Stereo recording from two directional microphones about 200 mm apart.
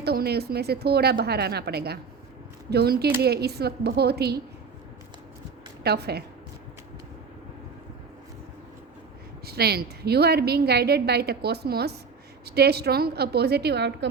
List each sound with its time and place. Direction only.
0.0 s a woman's voice: 55° right (ahead or behind)
5.8 s a woman's voice: 55° right (ahead or behind)
9.5 s a woman's voice: 50° right (ahead or behind)